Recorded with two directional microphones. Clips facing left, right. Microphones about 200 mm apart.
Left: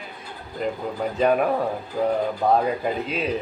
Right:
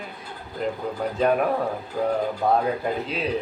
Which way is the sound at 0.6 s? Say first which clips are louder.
Left 1 dB; centre (ahead or behind).